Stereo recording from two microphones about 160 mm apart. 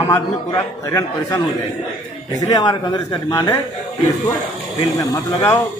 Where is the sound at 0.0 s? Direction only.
20° left (ahead or behind).